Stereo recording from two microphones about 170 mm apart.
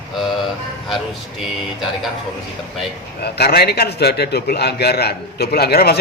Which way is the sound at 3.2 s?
70° left (ahead or behind).